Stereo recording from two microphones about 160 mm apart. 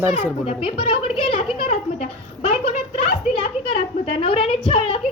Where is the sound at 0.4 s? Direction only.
35° left (ahead or behind).